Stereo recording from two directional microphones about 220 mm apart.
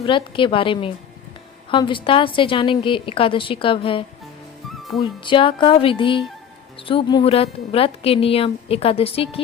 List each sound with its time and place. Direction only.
0.0 s a woman's voice: 25° left (ahead or behind)
4.8 s music: centre (ahead or behind)
5.2 s a woman's voice: 25° left (ahead or behind)